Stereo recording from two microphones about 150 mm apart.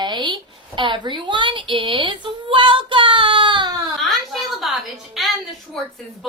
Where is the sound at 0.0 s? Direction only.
30° right (ahead or behind).